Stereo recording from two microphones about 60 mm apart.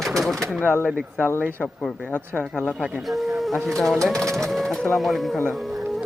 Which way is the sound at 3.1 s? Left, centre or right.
Centre.